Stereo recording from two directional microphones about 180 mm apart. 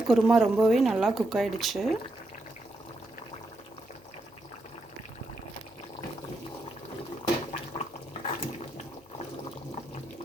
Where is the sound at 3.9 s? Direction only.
40° left (ahead or behind).